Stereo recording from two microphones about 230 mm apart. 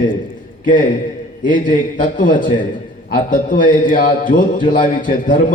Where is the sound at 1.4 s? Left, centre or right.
Left.